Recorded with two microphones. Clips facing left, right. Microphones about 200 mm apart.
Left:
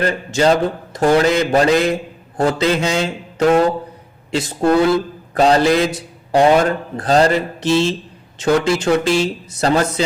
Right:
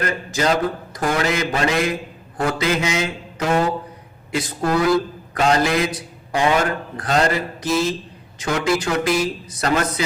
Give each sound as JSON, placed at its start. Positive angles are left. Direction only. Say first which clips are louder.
{"t": 0.0, "sound": "a man's voice", "louder": "left 6 dB", "side_deg": 30}